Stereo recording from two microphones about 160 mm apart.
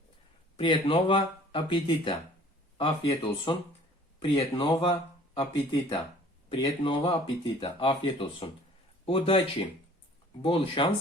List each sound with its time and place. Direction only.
0.5 s speech: 35° left (ahead or behind)
6.5 s speech: 35° left (ahead or behind)